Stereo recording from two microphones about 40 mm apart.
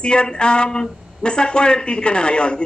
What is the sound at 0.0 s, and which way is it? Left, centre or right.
Speech, left.